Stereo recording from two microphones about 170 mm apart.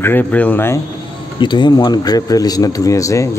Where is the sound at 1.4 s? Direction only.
25° left (ahead or behind).